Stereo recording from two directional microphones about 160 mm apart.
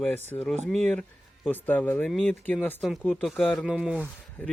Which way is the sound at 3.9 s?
10° left (ahead or behind).